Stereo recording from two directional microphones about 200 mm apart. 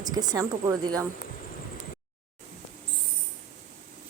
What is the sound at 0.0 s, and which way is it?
Speech, 20° right (ahead or behind).